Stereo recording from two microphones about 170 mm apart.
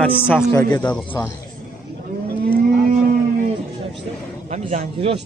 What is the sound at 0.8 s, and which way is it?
Speech, 25° left (ahead or behind).